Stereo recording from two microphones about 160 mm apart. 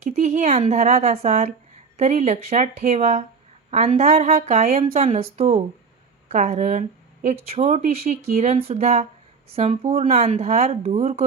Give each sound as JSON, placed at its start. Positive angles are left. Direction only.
{"t": 0.0, "sound": "a woman's voice", "side_deg": -45}